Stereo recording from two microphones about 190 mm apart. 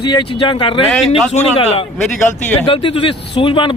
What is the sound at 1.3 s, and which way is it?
Speech, 35° left (ahead or behind).